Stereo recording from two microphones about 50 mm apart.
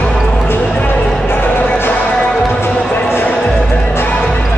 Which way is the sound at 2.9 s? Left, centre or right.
Left.